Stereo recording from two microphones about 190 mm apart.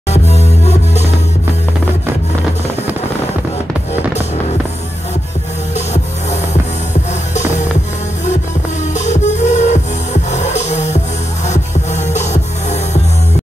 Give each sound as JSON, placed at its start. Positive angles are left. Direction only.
{"t": 0.1, "sound": "music", "side_deg": 35}
{"t": 6.9, "sound": "music", "side_deg": 40}
{"t": 8.9, "sound": "music", "side_deg": 40}